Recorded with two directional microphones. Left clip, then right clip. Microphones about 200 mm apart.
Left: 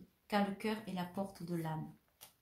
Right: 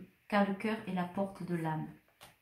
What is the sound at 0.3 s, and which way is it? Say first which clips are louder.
Speech: right 4 dB; 35° left (ahead or behind).